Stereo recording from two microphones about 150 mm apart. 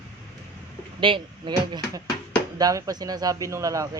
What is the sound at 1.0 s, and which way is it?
Speech, 35° right (ahead or behind).